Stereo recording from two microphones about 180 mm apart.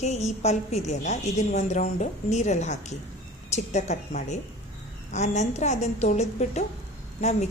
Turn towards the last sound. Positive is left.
turn(degrees=40)  # may be behind; listen again after turning